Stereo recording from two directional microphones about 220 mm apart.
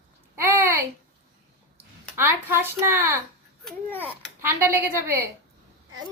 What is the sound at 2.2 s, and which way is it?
A child's voice, 10° right (ahead or behind).